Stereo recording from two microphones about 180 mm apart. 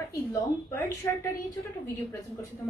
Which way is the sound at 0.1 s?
15° left (ahead or behind).